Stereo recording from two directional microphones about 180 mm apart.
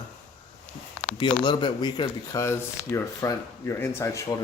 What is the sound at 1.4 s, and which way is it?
Speech, 25° left (ahead or behind).